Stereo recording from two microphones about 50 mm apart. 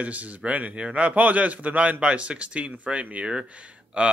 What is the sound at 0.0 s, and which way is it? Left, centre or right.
A man's voice, right.